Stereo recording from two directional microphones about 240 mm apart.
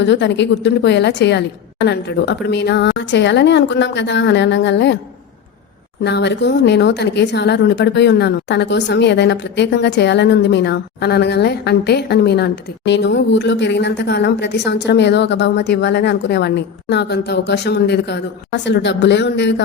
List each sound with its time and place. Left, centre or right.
0.0 s speech: left
6.0 s speech: left